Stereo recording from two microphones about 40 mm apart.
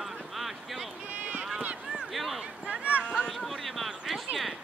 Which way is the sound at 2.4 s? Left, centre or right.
Right.